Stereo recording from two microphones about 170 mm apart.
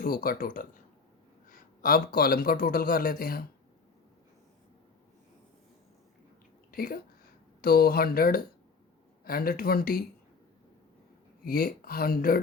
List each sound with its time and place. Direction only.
0.0 s speech: 60° left (ahead or behind)
6.7 s speech: 60° left (ahead or behind)
11.4 s speech: 60° left (ahead or behind)